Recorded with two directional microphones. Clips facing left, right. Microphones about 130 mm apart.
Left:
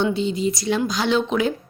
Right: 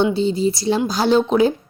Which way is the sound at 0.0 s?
30° right (ahead or behind).